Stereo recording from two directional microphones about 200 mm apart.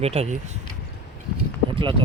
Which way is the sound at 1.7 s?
25° right (ahead or behind).